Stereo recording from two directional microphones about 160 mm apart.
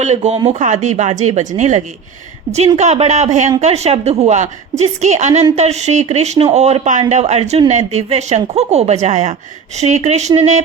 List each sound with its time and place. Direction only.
0.0 s a woman's voice: 45° right (ahead or behind)